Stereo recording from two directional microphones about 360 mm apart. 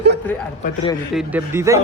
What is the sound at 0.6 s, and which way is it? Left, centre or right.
Speech, centre.